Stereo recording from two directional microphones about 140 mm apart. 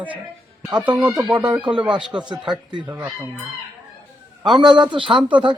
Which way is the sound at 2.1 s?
30° right (ahead or behind).